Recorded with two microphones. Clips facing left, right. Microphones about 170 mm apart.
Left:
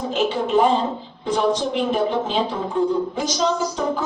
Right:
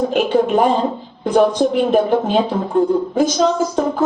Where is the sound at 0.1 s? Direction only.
60° right (ahead or behind).